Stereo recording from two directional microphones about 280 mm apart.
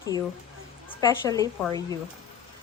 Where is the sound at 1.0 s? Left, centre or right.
Centre.